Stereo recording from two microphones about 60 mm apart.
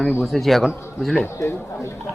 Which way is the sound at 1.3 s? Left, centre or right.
Left.